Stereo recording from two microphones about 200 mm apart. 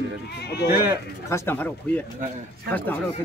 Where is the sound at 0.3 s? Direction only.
55° left (ahead or behind).